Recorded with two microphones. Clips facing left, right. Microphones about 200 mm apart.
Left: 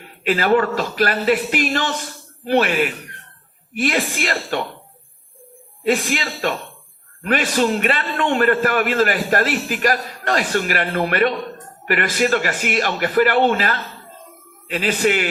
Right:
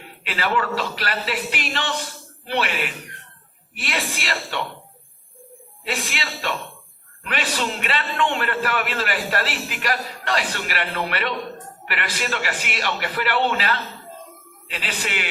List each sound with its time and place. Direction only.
0.3 s a man's voice: 45° left (ahead or behind)
3.9 s speech: centre (ahead or behind)
5.9 s speech: centre (ahead or behind)
7.2 s a man's voice: 45° left (ahead or behind)